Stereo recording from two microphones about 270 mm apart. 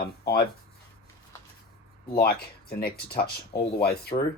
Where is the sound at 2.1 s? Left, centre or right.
Left.